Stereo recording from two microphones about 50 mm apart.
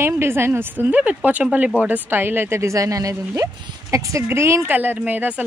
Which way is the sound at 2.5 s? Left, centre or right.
Right.